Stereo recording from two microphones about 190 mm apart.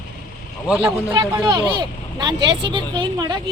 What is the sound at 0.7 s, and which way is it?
Speech, 5° right (ahead or behind).